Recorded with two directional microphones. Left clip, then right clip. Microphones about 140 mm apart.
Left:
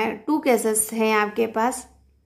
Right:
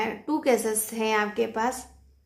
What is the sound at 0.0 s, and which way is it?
A woman's voice, 30° left (ahead or behind).